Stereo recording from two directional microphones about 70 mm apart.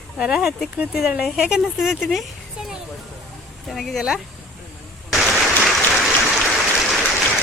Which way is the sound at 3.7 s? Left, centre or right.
Centre.